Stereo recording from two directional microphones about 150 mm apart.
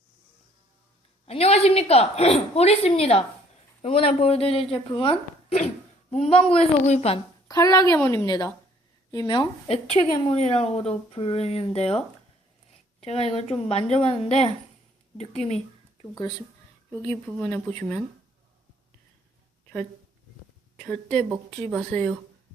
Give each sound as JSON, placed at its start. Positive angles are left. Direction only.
{"t": 1.3, "sound": "a woman's voice", "side_deg": 40}
{"t": 7.4, "sound": "a woman's voice", "side_deg": 20}
{"t": 16.9, "sound": "speech", "side_deg": 10}
{"t": 20.7, "sound": "a woman's voice", "side_deg": 5}